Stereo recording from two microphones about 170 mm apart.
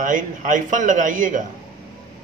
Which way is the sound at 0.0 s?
50° right (ahead or behind).